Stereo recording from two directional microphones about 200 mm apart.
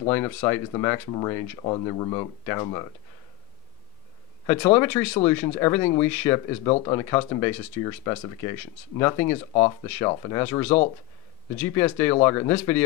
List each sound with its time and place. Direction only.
0.1 s speech: 15° left (ahead or behind)
4.7 s speech: 10° left (ahead or behind)
9.0 s speech: 15° left (ahead or behind)
9.5 s speech: 30° left (ahead or behind)
10.7 s speech: 35° left (ahead or behind)
11.5 s speech: 10° left (ahead or behind)